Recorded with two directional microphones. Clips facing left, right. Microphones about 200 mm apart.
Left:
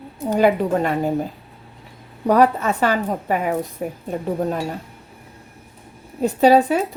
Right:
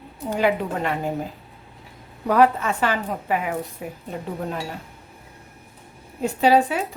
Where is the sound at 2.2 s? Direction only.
40° left (ahead or behind).